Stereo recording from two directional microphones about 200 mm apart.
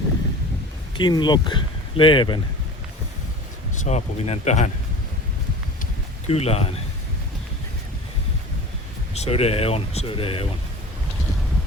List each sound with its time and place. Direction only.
0.9 s speech: 20° left (ahead or behind)
3.8 s speech: 35° left (ahead or behind)
5.8 s a sound: 30° left (ahead or behind)
9.1 s speech: 30° left (ahead or behind)